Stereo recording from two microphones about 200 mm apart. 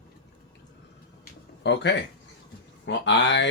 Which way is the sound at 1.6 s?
60° left (ahead or behind).